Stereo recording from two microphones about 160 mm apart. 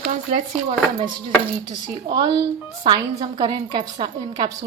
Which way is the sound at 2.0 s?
25° right (ahead or behind).